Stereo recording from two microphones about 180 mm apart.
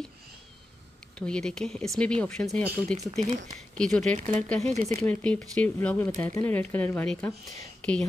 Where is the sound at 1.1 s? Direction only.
5° left (ahead or behind).